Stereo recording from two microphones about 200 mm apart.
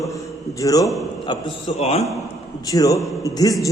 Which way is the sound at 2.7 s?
15° left (ahead or behind).